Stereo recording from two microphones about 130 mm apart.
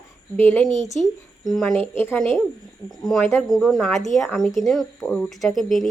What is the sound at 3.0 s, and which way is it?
Speech, centre (ahead or behind).